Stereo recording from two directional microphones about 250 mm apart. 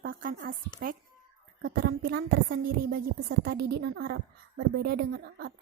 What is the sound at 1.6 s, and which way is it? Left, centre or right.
A woman's voice, right.